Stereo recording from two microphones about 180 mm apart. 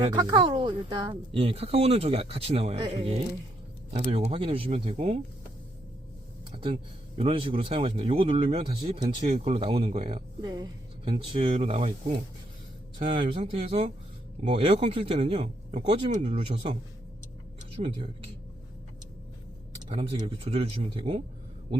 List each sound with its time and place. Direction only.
0.0 s speech: 25° right (ahead or behind)
6.5 s a sound: 30° right (ahead or behind)
7.2 s speech: 30° right (ahead or behind)
17.7 s speech: 35° right (ahead or behind)
19.9 s speech: 35° right (ahead or behind)